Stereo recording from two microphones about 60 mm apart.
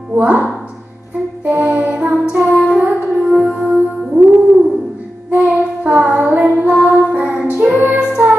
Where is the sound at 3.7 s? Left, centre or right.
Right.